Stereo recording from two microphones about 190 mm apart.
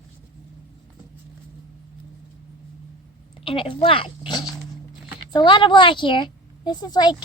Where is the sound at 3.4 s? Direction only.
25° left (ahead or behind).